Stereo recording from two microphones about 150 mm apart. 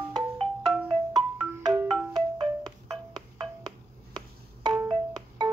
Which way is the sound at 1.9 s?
30° right (ahead or behind).